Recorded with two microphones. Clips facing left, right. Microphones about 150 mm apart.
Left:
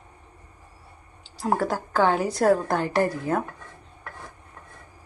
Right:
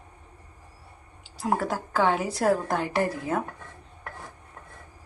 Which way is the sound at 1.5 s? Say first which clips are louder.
Left 2 dB; centre (ahead or behind).